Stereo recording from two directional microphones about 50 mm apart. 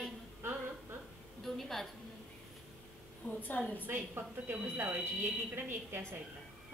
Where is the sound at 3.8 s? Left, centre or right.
Right.